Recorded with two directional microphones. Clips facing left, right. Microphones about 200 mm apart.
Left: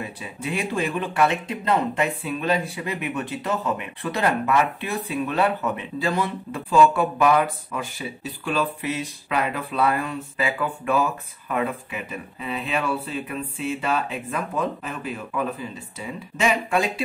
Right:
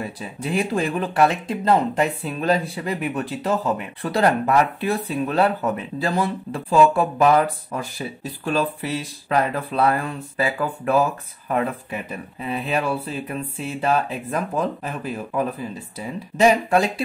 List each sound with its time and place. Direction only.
0.0 s speech: 35° right (ahead or behind)